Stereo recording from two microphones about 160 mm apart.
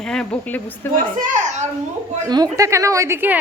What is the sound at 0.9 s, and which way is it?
Speech, 55° right (ahead or behind).